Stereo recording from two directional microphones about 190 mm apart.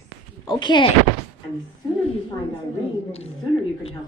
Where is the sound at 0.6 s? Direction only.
25° left (ahead or behind).